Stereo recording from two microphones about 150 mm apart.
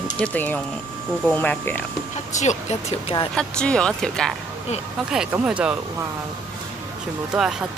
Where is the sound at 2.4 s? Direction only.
50° left (ahead or behind).